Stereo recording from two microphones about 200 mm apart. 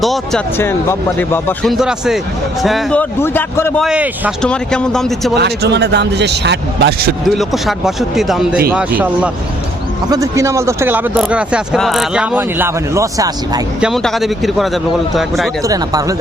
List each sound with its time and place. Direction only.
0.0 s a sound: centre (ahead or behind)
0.5 s speech: 10° left (ahead or behind)
1.6 s a man's voice: centre (ahead or behind)
3.8 s speech: 5° right (ahead or behind)
4.4 s a man's voice: 5° left (ahead or behind)
5.3 s a man's voice: 55° right (ahead or behind)
7.3 s a man's voice: centre (ahead or behind); by 13.6 s 15° right (ahead or behind)
13.8 s a man's voice: centre (ahead or behind)
15.6 s speech: 15° right (ahead or behind)